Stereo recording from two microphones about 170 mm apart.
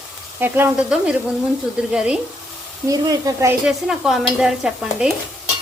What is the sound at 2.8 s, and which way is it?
Speech, 20° right (ahead or behind).